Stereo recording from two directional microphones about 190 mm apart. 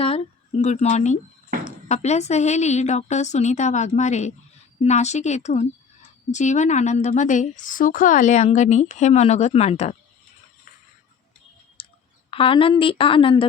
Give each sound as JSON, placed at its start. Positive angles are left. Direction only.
{"t": 0.0, "sound": "a woman's voice", "side_deg": 30}
{"t": 11.8, "sound": "clicking", "side_deg": 30}
{"t": 12.3, "sound": "a woman's voice", "side_deg": 30}